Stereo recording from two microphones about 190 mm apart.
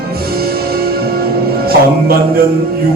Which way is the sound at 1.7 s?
55° right (ahead or behind).